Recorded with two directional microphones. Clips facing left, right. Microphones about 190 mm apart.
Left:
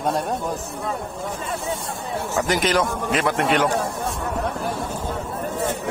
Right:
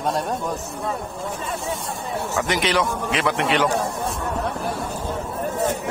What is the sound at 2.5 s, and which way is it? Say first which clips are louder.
Speech: left 1 dB; 45° left (ahead or behind).